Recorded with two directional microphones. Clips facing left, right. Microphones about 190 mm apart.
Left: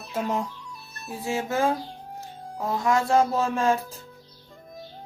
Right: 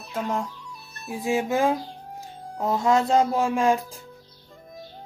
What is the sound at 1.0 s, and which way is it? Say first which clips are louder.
Speech: right 4 dB; 15° right (ahead or behind).